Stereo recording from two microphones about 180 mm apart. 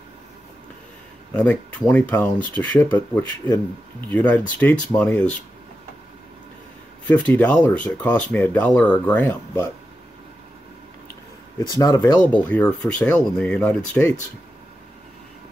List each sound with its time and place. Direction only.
1.3 s speech: 10° left (ahead or behind)
7.1 s speech: 10° left (ahead or behind)
11.8 s speech: 20° left (ahead or behind)
12.4 s speech: 5° left (ahead or behind)